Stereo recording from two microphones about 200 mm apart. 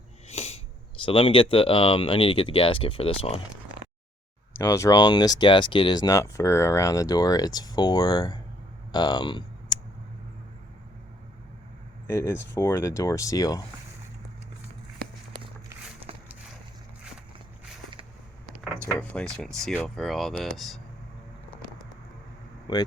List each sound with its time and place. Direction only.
0.3 s a sound: 30° left (ahead or behind)
1.0 s speech: 25° left (ahead or behind)
4.5 s speech: 15° left (ahead or behind)
12.0 s speech: 10° left (ahead or behind)
18.9 s speech: 5° left (ahead or behind)
22.6 s speech: 20° left (ahead or behind)